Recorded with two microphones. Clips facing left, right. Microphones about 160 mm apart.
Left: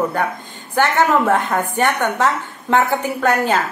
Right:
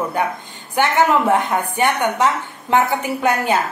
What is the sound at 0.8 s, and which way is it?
A woman's voice, 15° right (ahead or behind).